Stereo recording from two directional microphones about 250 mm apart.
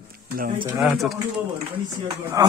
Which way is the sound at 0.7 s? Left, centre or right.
Centre.